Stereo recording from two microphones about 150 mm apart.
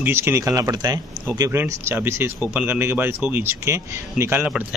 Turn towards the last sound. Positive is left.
turn(degrees=-15)  # may be behind; listen again after turning